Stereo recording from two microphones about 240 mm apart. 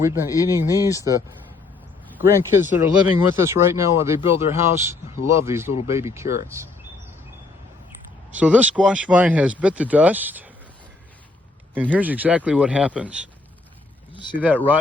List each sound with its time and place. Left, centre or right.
0.0 s speech: centre
2.1 s speech: centre
8.3 s speech: centre
11.7 s speech: centre
14.1 s speech: centre